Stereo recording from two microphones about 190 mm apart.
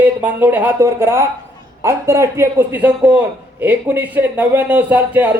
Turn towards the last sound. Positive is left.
turn(degrees=-10)  # may be behind; listen again after turning